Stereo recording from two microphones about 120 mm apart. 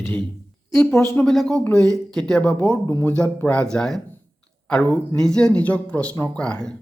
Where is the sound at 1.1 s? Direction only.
5° left (ahead or behind).